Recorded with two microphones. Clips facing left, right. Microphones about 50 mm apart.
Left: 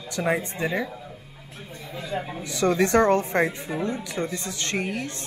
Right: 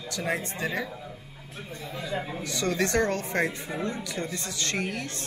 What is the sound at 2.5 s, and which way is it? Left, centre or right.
Speech, centre.